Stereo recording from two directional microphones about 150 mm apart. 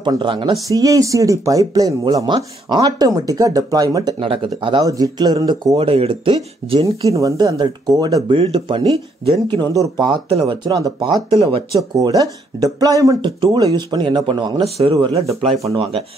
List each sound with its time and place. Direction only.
0.0 s speech: 35° right (ahead or behind)
7.0 s speech: 20° right (ahead or behind); by 9.0 s 40° right (ahead or behind)
9.5 s speech: 25° right (ahead or behind)